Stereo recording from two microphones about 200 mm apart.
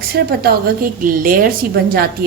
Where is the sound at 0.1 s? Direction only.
50° right (ahead or behind).